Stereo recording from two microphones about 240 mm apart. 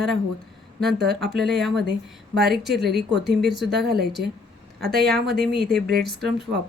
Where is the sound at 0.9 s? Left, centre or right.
Right.